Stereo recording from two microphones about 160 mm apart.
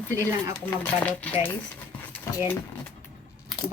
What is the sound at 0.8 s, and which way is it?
Speech, 10° left (ahead or behind).